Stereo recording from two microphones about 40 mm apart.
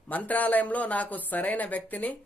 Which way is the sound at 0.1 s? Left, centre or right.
Left.